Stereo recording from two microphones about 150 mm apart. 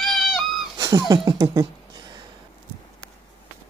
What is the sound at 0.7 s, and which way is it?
Speech, 20° right (ahead or behind).